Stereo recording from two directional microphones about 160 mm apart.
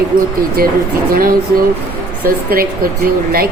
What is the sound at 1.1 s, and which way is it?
Speech, 65° right (ahead or behind).